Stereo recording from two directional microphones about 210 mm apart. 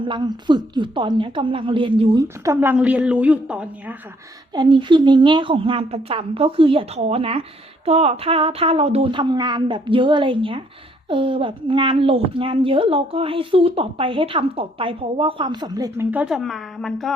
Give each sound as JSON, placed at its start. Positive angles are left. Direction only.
{"t": 0.0, "sound": "a woman's voice", "side_deg": -20}
{"t": 2.2, "sound": "a woman's voice", "side_deg": -10}
{"t": 4.5, "sound": "a woman's voice", "side_deg": -20}
{"t": 16.1, "sound": "a woman's voice", "side_deg": -5}